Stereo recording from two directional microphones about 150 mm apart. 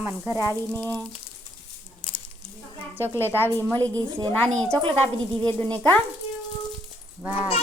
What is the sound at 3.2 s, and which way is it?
A woman's voice, 15° left (ahead or behind).